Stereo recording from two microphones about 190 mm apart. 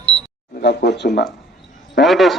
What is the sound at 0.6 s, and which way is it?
Speech, 60° left (ahead or behind).